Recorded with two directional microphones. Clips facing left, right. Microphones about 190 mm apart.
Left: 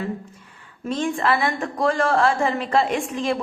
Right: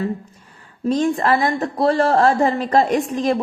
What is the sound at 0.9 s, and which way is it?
A woman's voice, 40° right (ahead or behind).